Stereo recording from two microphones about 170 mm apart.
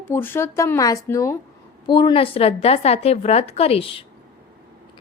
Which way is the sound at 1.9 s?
30° left (ahead or behind).